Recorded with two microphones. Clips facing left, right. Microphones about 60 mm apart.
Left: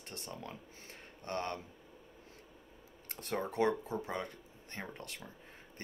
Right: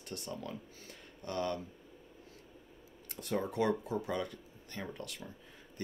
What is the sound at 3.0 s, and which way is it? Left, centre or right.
Speech, left.